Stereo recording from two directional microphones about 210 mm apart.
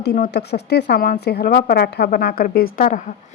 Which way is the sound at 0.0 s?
50° left (ahead or behind).